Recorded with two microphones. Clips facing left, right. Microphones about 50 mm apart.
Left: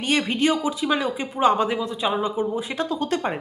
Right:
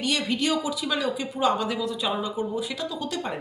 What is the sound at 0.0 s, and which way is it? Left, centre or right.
Speech, left.